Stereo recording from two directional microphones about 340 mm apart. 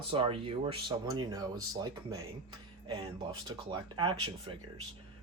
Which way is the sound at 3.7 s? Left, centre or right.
Centre.